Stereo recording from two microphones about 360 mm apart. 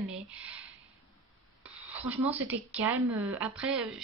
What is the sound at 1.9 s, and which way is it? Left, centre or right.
Speech, centre.